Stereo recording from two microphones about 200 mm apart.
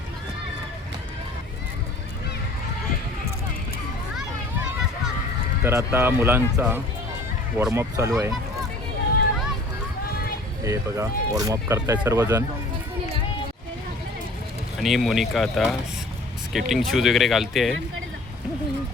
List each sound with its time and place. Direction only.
5.6 s speech: 10° right (ahead or behind)
10.6 s speech: 15° right (ahead or behind)
14.8 s speech: centre (ahead or behind)